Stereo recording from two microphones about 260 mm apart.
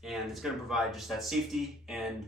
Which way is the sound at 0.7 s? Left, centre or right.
Centre.